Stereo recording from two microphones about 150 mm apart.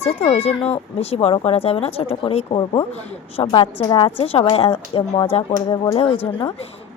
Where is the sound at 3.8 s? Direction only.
35° left (ahead or behind).